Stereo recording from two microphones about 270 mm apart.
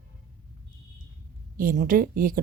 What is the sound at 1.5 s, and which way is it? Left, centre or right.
Speech, right.